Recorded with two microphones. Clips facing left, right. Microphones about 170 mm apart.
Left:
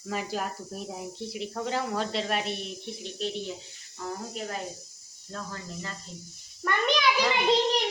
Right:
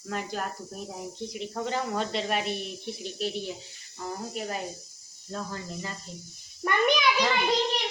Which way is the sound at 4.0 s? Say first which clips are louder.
Right 1 dB; 10° right (ahead or behind).